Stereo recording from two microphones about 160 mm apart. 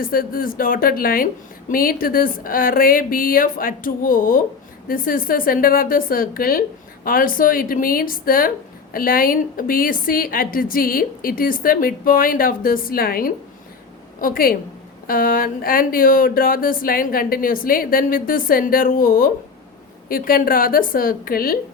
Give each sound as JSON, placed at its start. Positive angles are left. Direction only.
{"t": 0.0, "sound": "a woman's voice", "side_deg": 65}